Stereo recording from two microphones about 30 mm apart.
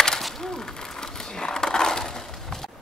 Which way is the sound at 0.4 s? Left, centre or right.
Centre.